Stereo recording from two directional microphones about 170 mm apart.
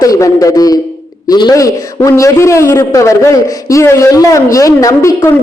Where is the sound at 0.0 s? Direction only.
20° left (ahead or behind).